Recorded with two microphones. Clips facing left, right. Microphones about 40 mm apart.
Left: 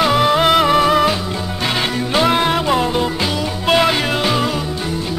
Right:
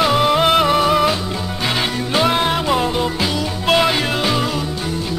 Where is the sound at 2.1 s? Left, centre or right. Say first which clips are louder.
Left 1 dB; centre.